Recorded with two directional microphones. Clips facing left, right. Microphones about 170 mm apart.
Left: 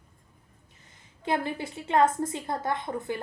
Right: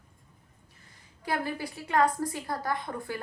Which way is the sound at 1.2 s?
25° left (ahead or behind).